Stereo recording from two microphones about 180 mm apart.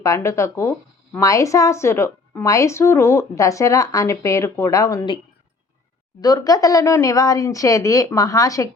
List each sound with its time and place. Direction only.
0.0 s a woman's voice: 15° left (ahead or behind)
6.2 s a woman's voice: 20° left (ahead or behind)